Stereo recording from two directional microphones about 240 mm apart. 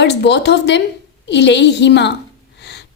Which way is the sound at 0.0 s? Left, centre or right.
Left.